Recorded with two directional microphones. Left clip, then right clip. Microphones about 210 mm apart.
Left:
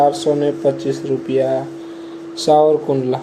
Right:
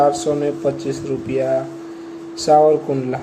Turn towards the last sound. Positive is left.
turn(degrees=10)  # may be behind; listen again after turning